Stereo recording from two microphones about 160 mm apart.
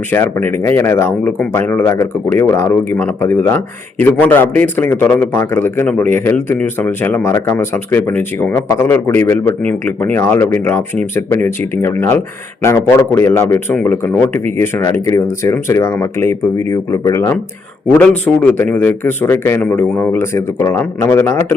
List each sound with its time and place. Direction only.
0.1 s a man's voice: 15° left (ahead or behind)